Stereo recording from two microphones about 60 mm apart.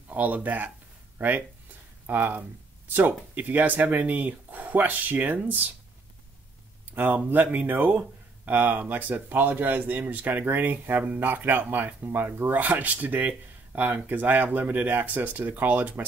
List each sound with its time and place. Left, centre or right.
0.1 s speech: right
1.1 s a sound: right
2.0 s speech: right
7.0 s speech: right